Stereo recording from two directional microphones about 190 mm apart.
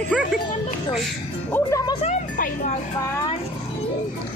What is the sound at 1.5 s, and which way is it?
Speech, 15° left (ahead or behind).